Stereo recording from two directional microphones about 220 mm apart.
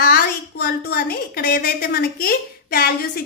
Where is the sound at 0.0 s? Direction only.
45° left (ahead or behind).